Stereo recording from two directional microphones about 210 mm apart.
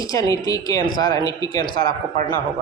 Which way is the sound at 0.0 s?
15° left (ahead or behind).